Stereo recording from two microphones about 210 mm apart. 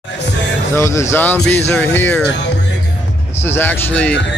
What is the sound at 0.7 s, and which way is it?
Speech, 15° left (ahead or behind).